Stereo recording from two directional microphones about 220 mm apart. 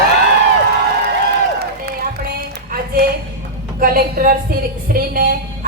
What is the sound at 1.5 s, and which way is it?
Run, 45° right (ahead or behind).